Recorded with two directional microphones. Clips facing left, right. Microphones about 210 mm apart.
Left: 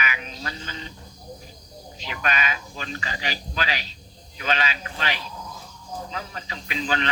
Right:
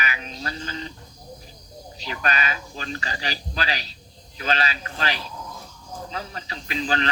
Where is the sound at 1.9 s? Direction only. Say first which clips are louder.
Right 1 dB; 35° right (ahead or behind).